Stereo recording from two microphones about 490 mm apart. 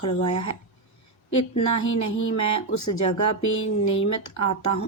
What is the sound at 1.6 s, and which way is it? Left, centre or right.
Speech, left.